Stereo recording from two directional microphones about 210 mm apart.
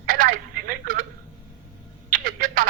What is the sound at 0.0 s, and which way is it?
Telephone, 45° right (ahead or behind).